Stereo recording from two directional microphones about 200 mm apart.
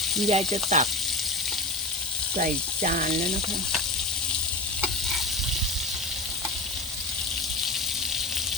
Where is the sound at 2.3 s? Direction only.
40° right (ahead or behind).